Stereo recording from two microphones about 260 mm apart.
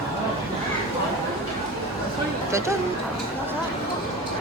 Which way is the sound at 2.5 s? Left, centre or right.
Centre.